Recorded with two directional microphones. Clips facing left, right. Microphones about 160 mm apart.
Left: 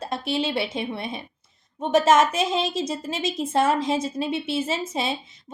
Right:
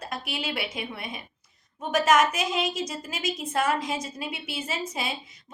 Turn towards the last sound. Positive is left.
turn(degrees=25)  # may be behind; listen again after turning